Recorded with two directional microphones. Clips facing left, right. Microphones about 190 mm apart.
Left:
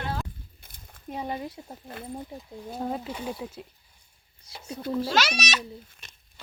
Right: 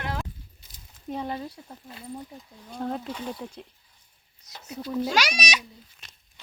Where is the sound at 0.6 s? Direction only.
55° left (ahead or behind).